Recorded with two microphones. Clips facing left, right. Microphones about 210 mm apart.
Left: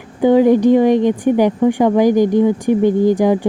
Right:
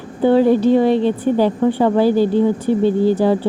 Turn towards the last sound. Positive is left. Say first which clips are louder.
# left 2 dB
turn(degrees=15)  # may be behind; listen again after turning